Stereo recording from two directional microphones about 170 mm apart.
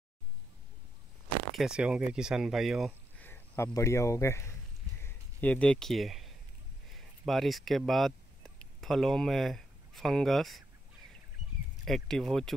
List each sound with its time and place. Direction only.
1.5 s speech: 5° right (ahead or behind)
3.2 s speech: 10° left (ahead or behind)
5.0 s a sound: 10° left (ahead or behind)
6.9 s speech: centre (ahead or behind)
11.8 s speech: centre (ahead or behind)